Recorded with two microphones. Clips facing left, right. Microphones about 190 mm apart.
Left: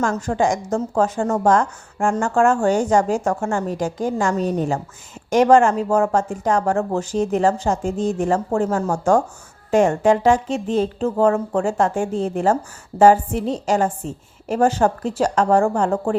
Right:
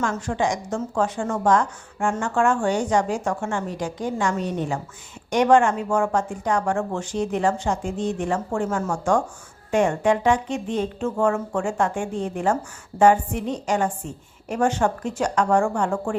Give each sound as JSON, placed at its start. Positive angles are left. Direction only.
{"t": 0.0, "sound": "a woman's voice", "side_deg": 40}